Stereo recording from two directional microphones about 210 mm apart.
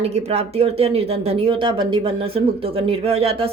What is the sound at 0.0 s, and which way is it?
Speech, 30° right (ahead or behind).